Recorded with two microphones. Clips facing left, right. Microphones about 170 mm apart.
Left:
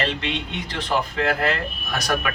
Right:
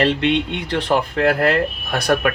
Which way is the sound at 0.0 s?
60° right (ahead or behind).